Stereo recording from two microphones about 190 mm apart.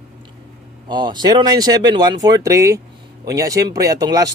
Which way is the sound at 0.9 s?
25° right (ahead or behind).